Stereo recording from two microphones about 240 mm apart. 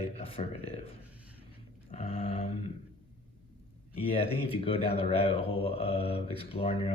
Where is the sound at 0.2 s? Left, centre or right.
Left.